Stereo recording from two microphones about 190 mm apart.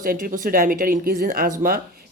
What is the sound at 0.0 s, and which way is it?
A woman's voice, 50° right (ahead or behind).